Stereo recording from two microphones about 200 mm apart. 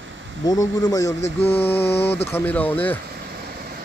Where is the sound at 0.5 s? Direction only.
15° left (ahead or behind).